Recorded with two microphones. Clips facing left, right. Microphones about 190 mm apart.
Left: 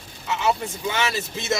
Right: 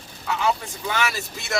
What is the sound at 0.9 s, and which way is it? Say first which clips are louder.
Speech: right 1 dB; 20° left (ahead or behind).